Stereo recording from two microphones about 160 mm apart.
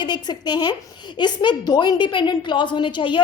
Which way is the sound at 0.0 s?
25° left (ahead or behind).